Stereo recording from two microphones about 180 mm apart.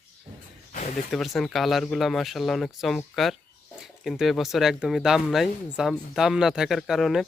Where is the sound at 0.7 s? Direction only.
45° left (ahead or behind).